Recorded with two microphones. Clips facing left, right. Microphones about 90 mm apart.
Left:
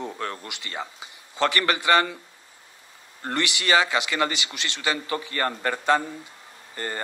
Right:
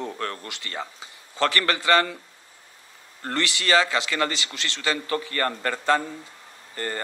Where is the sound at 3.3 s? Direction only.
20° left (ahead or behind).